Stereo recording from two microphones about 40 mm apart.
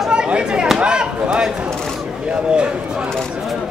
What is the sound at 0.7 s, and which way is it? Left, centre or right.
Chop, right.